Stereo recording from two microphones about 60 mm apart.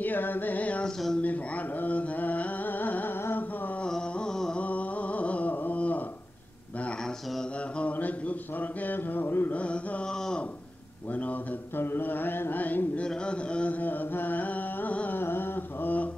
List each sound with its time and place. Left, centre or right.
0.0 s mantra: left
0.8 s speech: centre
1.2 s a sound: left
3.8 s carnatic music: centre
4.6 s a sound: left
7.7 s speech: left
9.6 s mantra: centre
11.7 s mantra: left
13.0 s mantra: centre; by 16.1 s left